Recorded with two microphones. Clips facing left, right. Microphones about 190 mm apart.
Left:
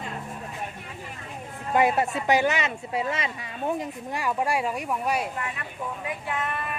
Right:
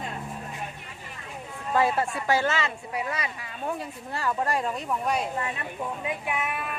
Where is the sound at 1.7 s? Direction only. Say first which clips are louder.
Left 2 dB; 20° left (ahead or behind).